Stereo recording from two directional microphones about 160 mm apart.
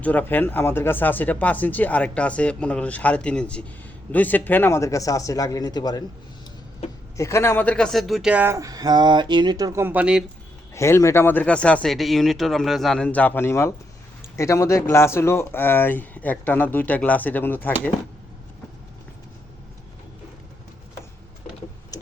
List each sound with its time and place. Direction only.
0.0 s speech: 10° left (ahead or behind)
7.2 s speech: 15° left (ahead or behind); by 9.8 s 25° right (ahead or behind)
9.8 s speech: 10° right (ahead or behind)
10.8 s speech: 15° left (ahead or behind)